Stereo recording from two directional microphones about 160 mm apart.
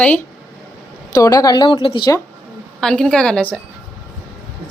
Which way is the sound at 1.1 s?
25° left (ahead or behind).